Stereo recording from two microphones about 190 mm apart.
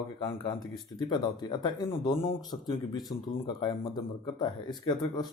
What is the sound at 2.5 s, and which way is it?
Speech, 20° left (ahead or behind).